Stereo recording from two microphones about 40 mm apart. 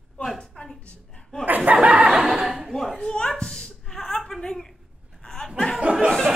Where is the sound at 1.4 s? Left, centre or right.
Right.